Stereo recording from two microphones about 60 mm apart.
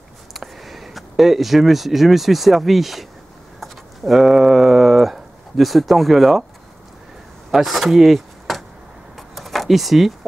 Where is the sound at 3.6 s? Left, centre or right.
Centre.